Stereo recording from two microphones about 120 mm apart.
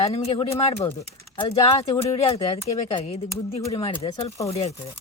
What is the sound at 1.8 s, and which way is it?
Speech, 55° left (ahead or behind).